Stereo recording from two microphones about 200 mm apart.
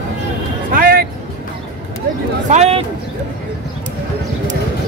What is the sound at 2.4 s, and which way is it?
Speech, 35° right (ahead or behind).